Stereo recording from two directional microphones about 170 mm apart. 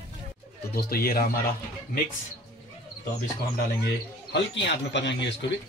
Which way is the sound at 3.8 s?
85° left.